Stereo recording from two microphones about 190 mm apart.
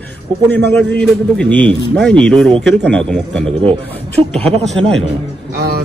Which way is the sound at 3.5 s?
30° right (ahead or behind).